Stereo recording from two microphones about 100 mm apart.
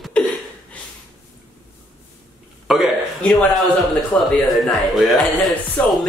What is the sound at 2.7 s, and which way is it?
Speech, 5° right (ahead or behind).